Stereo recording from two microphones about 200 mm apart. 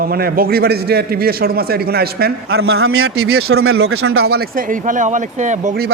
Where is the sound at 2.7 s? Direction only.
90° right.